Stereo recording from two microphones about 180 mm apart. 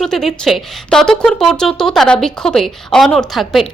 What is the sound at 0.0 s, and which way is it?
Speech, centre (ahead or behind).